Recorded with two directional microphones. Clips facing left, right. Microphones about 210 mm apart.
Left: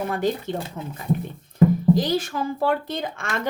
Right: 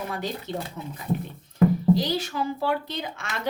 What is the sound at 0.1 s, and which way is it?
A woman's voice, 50° left (ahead or behind).